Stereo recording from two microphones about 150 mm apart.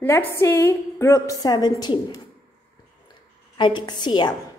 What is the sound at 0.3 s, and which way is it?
A woman's voice, 15° left (ahead or behind).